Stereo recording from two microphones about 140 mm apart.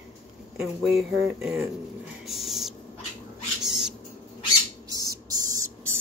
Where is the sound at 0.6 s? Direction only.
5° right (ahead or behind).